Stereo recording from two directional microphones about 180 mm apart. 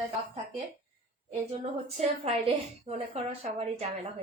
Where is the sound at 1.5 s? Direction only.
35° right (ahead or behind).